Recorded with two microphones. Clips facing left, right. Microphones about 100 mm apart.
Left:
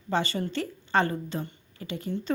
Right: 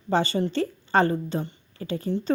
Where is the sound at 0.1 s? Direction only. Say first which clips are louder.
Right 5 dB; 30° right (ahead or behind).